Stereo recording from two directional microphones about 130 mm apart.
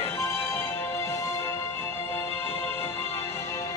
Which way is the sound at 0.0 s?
20° left (ahead or behind).